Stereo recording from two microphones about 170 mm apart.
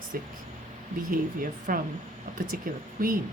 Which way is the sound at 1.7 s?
55° right (ahead or behind).